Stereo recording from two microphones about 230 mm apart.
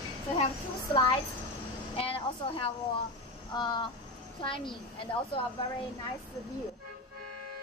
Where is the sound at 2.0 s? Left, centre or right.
Left.